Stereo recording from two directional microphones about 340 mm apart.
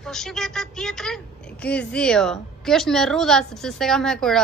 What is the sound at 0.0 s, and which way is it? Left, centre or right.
Speech, centre.